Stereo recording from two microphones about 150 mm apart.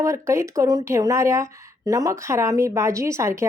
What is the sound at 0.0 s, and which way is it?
Speech, 20° right (ahead or behind).